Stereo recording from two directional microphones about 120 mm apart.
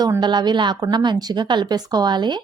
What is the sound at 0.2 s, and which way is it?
Speech, 40° right (ahead or behind).